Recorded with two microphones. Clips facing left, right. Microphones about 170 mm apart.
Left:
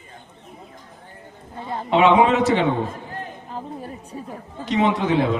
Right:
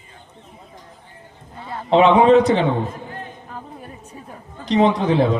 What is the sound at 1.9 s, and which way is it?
Speech, 30° right (ahead or behind).